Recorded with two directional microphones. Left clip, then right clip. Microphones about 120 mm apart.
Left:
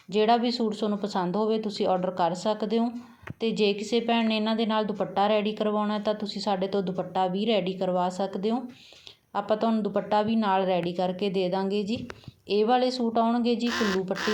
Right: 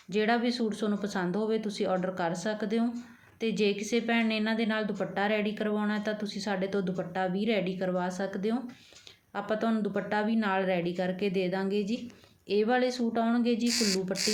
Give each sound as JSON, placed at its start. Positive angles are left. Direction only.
{"t": 0.1, "sound": "a woman's voice", "side_deg": 15}
{"t": 13.7, "sound": "speech", "side_deg": -25}